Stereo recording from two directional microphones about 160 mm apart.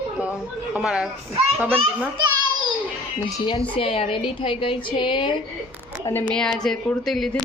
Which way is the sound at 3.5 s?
35° left (ahead or behind).